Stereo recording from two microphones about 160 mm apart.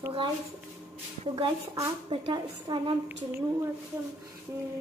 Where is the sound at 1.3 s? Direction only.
30° right (ahead or behind).